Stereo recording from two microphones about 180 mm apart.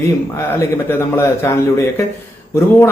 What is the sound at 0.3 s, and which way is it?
Speech, 10° left (ahead or behind).